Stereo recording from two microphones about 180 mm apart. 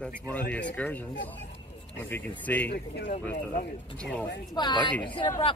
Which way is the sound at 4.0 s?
5° left (ahead or behind).